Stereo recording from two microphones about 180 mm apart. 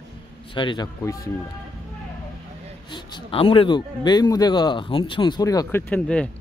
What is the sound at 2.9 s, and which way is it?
Speech, 25° left (ahead or behind).